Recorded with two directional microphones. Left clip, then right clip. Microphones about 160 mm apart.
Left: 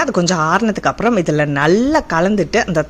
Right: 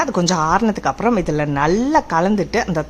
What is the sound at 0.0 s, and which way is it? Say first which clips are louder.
A woman's voice: left 2 dB; 5° left (ahead or behind).